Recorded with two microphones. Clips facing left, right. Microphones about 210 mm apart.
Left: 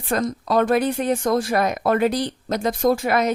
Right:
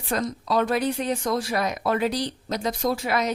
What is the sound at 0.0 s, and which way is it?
Speech, 50° left (ahead or behind).